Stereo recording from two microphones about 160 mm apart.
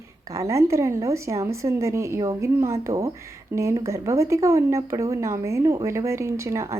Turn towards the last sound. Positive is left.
turn(degrees=-20)  # may be behind; listen again after turning